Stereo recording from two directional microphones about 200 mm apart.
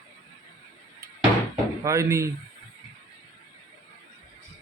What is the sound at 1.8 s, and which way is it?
Speech, 15° right (ahead or behind).